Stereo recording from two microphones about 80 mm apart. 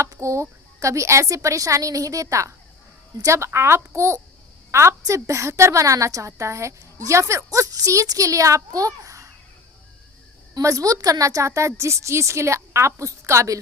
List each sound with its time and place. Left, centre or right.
0.0 s a woman's voice: right
10.6 s a woman's voice: right